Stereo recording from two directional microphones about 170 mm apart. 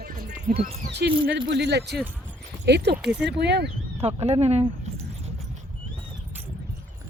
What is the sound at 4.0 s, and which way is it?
Speech, 35° right (ahead or behind).